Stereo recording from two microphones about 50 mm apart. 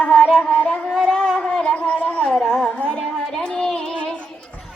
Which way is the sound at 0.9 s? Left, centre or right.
Centre.